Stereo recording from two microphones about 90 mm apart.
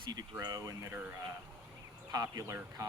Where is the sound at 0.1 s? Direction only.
45° right (ahead or behind).